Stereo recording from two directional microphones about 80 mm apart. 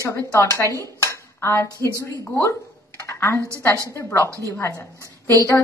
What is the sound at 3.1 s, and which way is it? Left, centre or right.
Speech, left.